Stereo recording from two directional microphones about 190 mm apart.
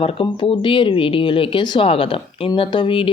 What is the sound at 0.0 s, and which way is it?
Speech, 30° left (ahead or behind).